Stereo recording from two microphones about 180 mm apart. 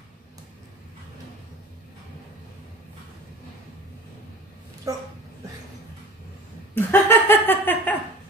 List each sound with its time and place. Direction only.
4.9 s speech: 20° right (ahead or behind)
6.7 s speech: 10° left (ahead or behind)